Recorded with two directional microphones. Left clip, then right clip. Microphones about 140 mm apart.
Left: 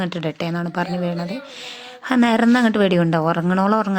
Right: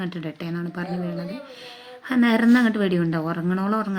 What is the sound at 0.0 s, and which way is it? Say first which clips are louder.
A woman's voice: left 8 dB; 55° left (ahead or behind).